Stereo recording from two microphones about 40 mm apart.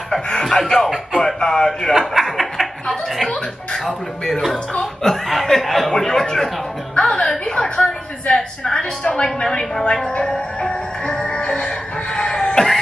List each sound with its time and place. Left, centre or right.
0.3 s speech: centre
1.9 s chuckle: centre
3.8 s speech: centre
5.9 s speech: centre
7.0 s a woman's voice: left
11.4 s music: left